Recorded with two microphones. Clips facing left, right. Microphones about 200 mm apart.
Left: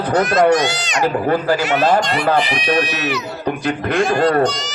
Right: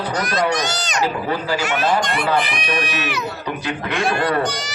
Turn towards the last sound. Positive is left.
turn(degrees=-60)  # may be behind; listen again after turning